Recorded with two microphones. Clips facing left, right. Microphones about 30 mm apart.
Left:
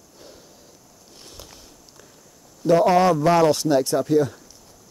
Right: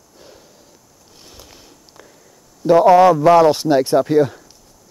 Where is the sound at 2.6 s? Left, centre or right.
Right.